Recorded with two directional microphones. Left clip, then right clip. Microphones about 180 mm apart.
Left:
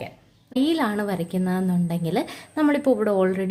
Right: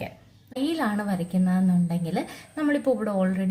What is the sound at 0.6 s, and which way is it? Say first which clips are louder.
A woman's voice: left 4 dB; 40° left (ahead or behind).